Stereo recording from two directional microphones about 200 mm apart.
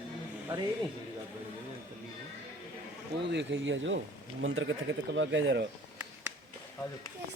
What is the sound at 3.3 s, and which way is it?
Speech, 65° right (ahead or behind).